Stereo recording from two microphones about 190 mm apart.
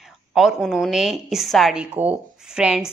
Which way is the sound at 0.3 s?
Centre (ahead or behind).